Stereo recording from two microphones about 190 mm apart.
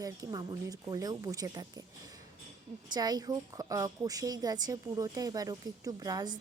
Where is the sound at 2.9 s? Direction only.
20° right (ahead or behind).